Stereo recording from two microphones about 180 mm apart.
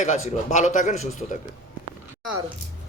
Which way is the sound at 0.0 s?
40° left (ahead or behind).